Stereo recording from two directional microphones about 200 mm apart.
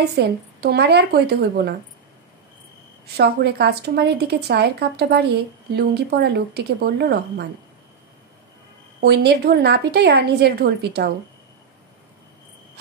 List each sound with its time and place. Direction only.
0.2 s a woman's voice: 55° right (ahead or behind)
3.2 s a woman's voice: 55° right (ahead or behind)
9.0 s a woman's voice: 55° right (ahead or behind)